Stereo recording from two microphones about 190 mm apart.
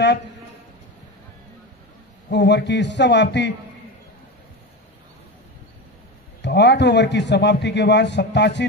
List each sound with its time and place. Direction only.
2.3 s a man's voice: 65° left (ahead or behind)
6.4 s a man's voice: 65° left (ahead or behind)